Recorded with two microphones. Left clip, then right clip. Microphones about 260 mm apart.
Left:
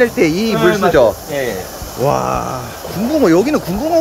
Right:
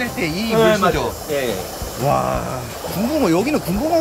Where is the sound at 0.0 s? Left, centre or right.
Centre.